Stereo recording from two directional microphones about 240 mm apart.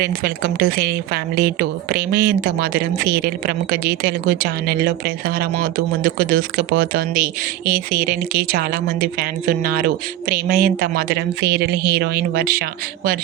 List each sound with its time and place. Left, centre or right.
0.0 s speech: right